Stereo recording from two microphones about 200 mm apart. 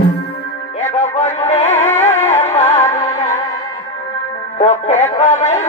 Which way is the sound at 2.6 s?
15° left (ahead or behind).